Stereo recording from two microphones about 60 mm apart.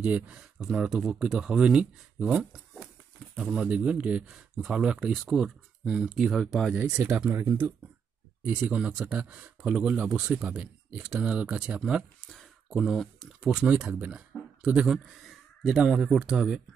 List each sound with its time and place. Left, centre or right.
0.0 s speech: centre
3.3 s speech: right
6.7 s speech: right
7.2 s speech: right
8.5 s speech: right
12.6 s speech: centre
12.9 s speech: centre
13.4 s speech: centre